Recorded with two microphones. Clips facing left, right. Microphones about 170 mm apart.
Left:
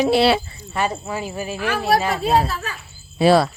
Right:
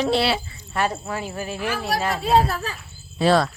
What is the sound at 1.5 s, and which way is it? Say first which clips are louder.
Speech: left 7 dB; 65° left (ahead or behind).